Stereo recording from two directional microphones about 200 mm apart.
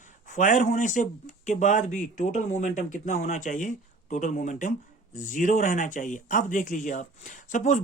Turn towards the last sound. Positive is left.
turn(degrees=40)  # may be behind; listen again after turning